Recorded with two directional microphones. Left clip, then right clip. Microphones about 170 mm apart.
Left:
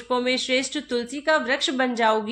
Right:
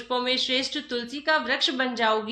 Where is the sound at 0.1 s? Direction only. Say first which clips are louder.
Left 2 dB; 50° left (ahead or behind).